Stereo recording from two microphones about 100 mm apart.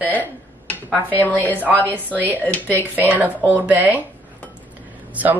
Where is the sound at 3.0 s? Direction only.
15° right (ahead or behind).